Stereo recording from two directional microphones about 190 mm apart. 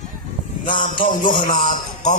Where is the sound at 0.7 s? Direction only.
45° left (ahead or behind).